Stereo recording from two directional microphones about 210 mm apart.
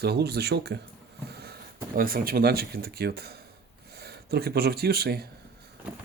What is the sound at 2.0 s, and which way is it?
Speech, 45° right (ahead or behind).